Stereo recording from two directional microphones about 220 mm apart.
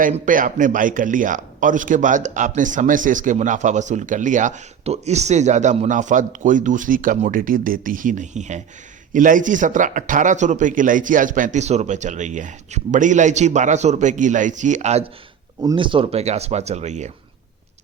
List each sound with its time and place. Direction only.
0.0 s a man's voice: 40° right (ahead or behind)